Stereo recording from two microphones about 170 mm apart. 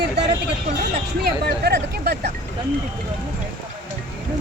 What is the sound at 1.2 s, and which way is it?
Speech, 70° right (ahead or behind).